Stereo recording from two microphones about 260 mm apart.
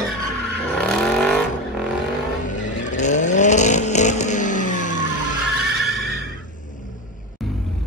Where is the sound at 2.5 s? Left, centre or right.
Left.